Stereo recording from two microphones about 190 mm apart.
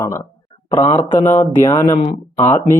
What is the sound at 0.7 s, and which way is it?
Speech, 30° left (ahead or behind).